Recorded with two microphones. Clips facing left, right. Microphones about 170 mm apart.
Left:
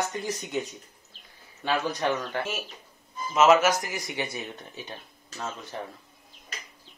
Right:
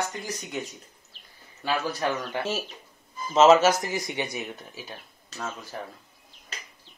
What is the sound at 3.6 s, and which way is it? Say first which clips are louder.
Speech: right 3 dB; 25° right (ahead or behind).